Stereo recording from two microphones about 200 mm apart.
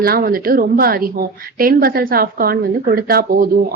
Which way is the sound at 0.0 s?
45° right (ahead or behind).